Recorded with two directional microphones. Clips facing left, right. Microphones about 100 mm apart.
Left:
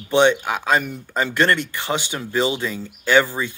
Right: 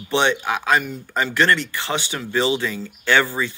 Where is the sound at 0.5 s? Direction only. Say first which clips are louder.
Even; 30° left (ahead or behind).